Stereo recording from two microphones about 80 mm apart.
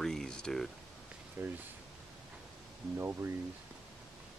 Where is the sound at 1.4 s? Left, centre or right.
Right.